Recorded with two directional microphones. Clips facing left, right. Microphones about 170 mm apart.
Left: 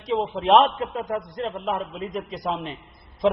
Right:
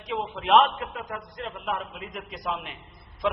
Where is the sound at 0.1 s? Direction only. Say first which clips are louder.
Left 4 dB; 35° left (ahead or behind).